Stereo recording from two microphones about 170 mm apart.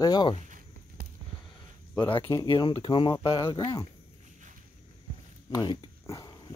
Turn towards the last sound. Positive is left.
turn(degrees=20)  # may be behind; listen again after turning